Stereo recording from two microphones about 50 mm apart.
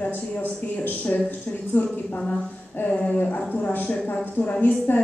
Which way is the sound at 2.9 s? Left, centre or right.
Left.